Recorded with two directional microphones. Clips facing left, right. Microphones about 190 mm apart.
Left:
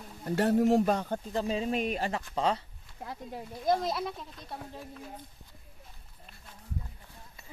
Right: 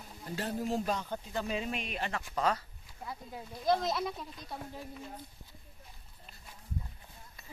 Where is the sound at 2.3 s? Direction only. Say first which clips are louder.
Left 1 dB; 25° left (ahead or behind).